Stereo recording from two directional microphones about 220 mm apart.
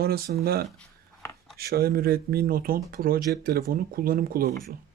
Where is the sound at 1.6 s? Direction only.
45° right (ahead or behind).